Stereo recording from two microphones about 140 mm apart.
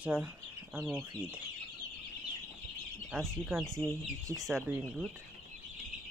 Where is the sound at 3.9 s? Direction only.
25° right (ahead or behind).